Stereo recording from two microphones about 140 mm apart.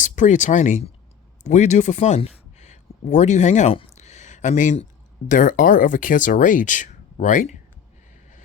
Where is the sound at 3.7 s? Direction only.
55° left (ahead or behind).